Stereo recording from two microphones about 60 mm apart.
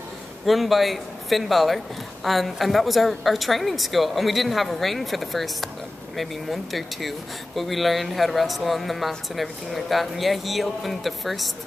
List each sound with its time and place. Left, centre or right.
0.5 s speech: centre